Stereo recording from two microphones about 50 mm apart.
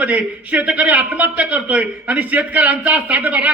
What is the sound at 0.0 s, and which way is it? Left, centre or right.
A man's voice, right.